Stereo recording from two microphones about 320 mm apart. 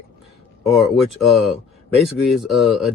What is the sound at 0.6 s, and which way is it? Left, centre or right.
Speech, centre.